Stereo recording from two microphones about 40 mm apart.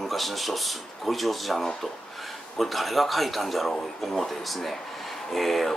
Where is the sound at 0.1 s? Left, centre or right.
Centre.